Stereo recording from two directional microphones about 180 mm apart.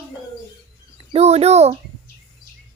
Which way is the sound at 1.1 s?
35° right (ahead or behind).